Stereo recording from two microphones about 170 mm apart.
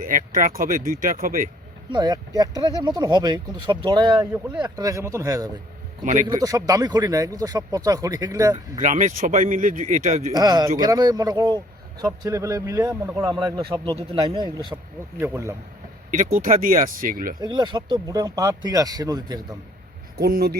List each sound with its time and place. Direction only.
0.0 s speech: 50° right (ahead or behind)
1.9 s speech: 25° right (ahead or behind)
8.8 s speech: 45° right (ahead or behind)
10.3 s speech: 25° right (ahead or behind)
15.2 s speech: 15° right (ahead or behind)
16.1 s speech: 50° right (ahead or behind)
17.4 s speech: 25° right (ahead or behind)
20.2 s speech: 65° right (ahead or behind)